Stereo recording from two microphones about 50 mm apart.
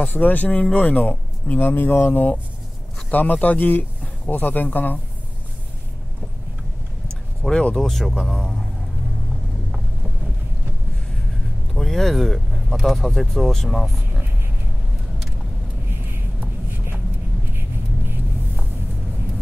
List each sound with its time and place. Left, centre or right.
0.0 s speech: left
1.6 s speech: left
7.7 s speech: centre
11.7 s speech: centre
16.7 s vehicle: right